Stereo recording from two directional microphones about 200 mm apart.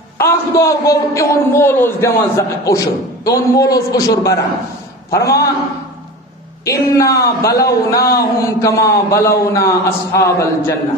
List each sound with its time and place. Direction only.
0.2 s a man's voice: 15° left (ahead or behind)
6.6 s a man's voice: 15° left (ahead or behind)